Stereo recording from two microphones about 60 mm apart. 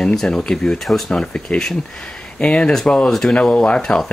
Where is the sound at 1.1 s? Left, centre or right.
Centre.